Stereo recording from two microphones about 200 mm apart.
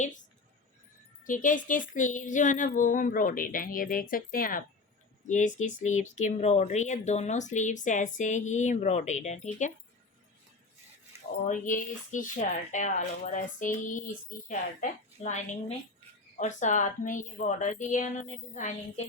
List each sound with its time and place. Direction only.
1.2 s speech: 40° left (ahead or behind)
11.3 s speech: 40° left (ahead or behind)